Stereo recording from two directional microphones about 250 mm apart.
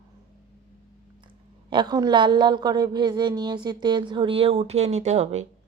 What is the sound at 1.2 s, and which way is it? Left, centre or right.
Speech, centre.